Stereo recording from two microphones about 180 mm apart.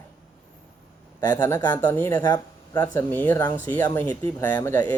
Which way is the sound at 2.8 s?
10° left (ahead or behind).